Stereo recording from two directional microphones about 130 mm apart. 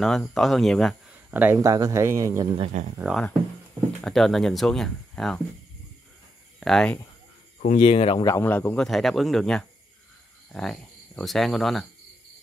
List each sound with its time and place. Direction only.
0.0 s speech: centre (ahead or behind)
1.3 s speech: 15° right (ahead or behind)
1.6 s speech: 25° right (ahead or behind)
2.7 s speech: 65° right (ahead or behind)
4.0 s speech: centre (ahead or behind)
6.6 s speech: 5° left (ahead or behind)
7.6 s speech: 50° left (ahead or behind)
8.2 s speech: 25° left (ahead or behind)
8.5 s speech: 10° left (ahead or behind)